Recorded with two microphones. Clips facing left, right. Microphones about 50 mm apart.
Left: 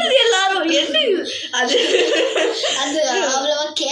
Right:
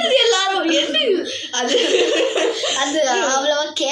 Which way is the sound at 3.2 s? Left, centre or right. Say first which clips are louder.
Right 1 dB; right.